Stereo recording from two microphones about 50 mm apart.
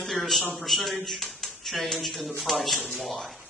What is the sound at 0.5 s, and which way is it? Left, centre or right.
A man's voice, centre.